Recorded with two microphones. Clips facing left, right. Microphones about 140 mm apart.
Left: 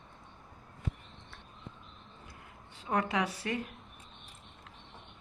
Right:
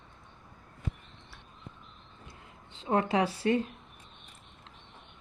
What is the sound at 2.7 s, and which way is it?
A woman's voice, 25° right (ahead or behind).